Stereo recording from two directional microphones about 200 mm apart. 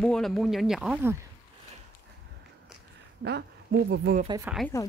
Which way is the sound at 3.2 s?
55° right (ahead or behind).